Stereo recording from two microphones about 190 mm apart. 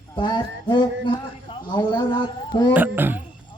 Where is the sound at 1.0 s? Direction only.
25° left (ahead or behind).